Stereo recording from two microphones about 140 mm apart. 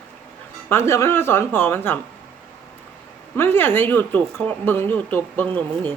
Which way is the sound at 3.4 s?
15° left (ahead or behind).